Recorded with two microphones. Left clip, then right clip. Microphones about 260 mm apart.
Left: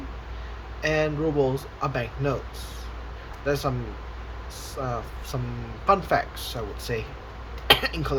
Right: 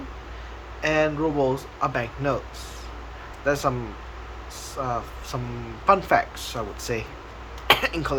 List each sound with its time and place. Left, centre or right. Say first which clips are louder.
0.8 s speech: right 2 dB; centre
3.4 s speech: right 3 dB; centre
4.7 s speech: right 3 dB; centre